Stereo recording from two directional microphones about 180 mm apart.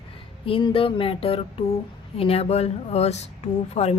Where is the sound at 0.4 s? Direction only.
30° left (ahead or behind).